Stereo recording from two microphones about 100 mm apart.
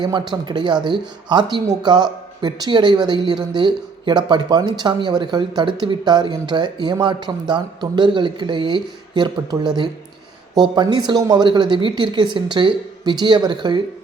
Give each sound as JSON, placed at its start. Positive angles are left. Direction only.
{"t": 0.0, "sound": "speech", "side_deg": -45}